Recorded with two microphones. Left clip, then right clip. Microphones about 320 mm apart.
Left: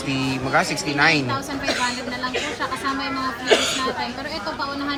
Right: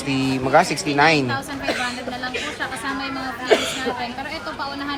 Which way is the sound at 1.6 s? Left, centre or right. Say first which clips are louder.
Left 1 dB; centre.